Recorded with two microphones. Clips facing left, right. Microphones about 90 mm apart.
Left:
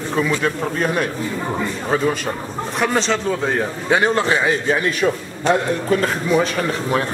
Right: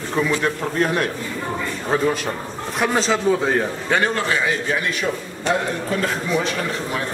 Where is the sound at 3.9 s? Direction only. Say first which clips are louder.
Left 4 dB; 20° left (ahead or behind).